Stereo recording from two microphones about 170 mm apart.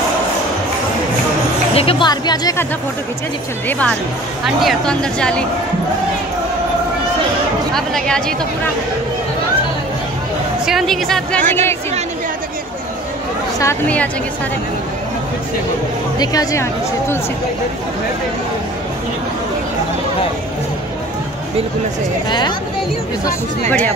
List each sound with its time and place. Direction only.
1.8 s speech: 30° left (ahead or behind)
3.6 s a woman's voice: 5° left (ahead or behind)
7.7 s a woman's voice: 5° left (ahead or behind)
10.6 s a woman's voice: centre (ahead or behind)
13.6 s speech: 10° left (ahead or behind)
16.2 s speech: 20° left (ahead or behind)